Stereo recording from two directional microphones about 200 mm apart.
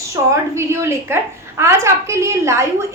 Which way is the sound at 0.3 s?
15° right (ahead or behind).